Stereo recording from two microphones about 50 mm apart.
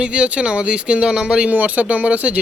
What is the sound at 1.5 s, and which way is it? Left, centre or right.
Speech, right.